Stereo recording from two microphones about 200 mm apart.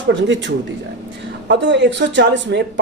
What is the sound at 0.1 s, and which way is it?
Speech, 65° right (ahead or behind).